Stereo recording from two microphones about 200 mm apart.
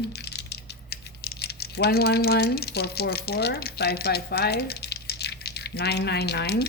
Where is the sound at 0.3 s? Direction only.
55° left (ahead or behind).